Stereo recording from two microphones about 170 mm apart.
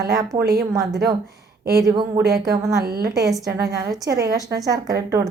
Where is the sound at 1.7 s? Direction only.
25° right (ahead or behind).